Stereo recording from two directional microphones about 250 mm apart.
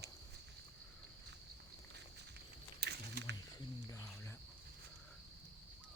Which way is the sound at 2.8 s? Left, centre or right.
Right.